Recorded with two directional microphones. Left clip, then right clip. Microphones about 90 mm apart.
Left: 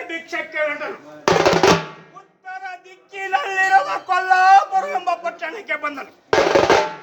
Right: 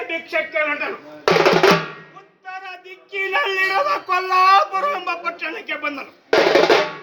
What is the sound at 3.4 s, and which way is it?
Speech, 25° left (ahead or behind).